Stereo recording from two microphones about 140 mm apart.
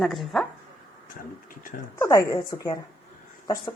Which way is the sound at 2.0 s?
25° left (ahead or behind).